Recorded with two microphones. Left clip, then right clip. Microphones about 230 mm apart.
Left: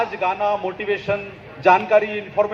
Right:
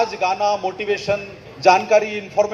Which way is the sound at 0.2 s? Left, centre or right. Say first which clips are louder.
Right 2 dB; right.